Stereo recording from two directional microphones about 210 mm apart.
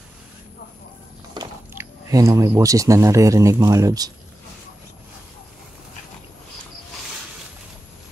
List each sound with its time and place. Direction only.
1.3 s speech: 15° right (ahead or behind)